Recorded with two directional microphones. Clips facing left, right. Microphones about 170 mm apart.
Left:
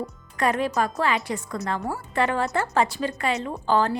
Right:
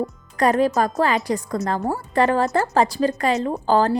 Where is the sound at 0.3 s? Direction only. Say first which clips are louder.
Right 5 dB; 40° right (ahead or behind).